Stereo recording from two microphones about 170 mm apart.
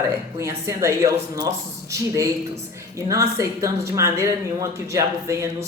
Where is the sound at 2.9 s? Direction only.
20° right (ahead or behind).